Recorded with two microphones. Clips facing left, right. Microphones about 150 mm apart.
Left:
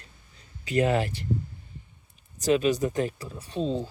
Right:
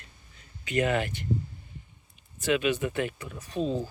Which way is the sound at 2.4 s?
35° left (ahead or behind).